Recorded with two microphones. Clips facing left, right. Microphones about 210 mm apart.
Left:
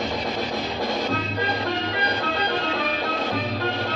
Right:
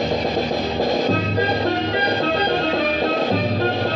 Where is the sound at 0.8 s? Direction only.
35° right (ahead or behind).